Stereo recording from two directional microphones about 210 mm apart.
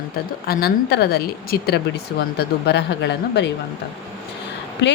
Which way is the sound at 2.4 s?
55° left (ahead or behind).